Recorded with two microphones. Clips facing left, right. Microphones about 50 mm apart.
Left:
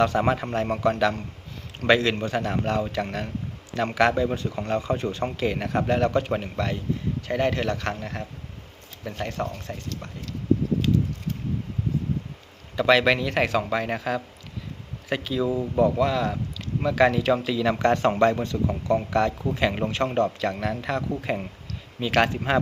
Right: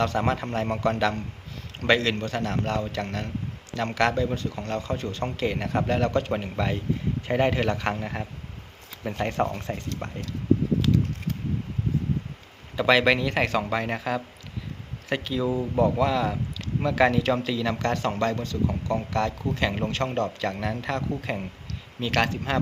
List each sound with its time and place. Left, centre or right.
0.0 s speech: centre
5.4 s speech: centre
9.2 s speech: right
12.7 s speech: centre
18.1 s speech: centre
18.7 s speech: centre
22.1 s speech: centre